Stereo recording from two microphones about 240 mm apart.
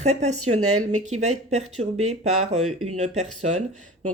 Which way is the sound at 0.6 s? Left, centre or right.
Right.